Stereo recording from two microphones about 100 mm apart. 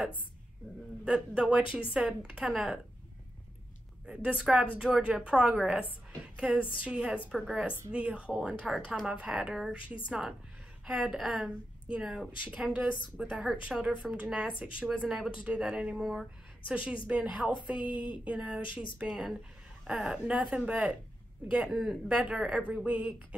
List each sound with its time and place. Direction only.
1.0 s speech: 10° right (ahead or behind)
4.0 s speech: 10° right (ahead or behind)